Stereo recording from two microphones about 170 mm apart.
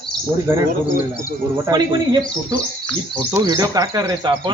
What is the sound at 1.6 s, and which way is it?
Speech, 25° right (ahead or behind).